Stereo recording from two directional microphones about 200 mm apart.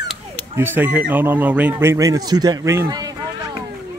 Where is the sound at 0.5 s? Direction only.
10° right (ahead or behind).